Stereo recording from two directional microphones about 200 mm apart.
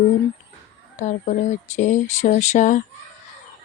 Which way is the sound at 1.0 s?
35° left (ahead or behind).